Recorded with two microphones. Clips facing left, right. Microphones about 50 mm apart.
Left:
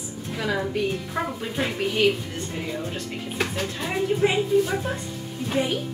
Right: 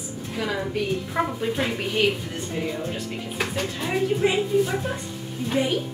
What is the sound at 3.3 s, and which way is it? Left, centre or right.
A woman's voice, centre.